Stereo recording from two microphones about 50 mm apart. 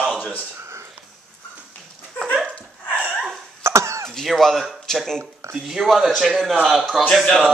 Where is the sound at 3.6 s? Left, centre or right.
Right.